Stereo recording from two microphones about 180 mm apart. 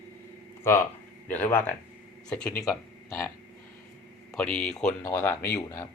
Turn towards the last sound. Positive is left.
turn(degrees=15)  # may be behind; listen again after turning